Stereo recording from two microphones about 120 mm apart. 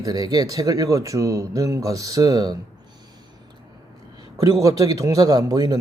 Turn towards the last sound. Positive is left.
turn(degrees=-35)  # may be behind; listen again after turning